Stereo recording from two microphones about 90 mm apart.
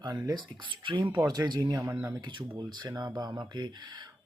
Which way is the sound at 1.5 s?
45° right (ahead or behind).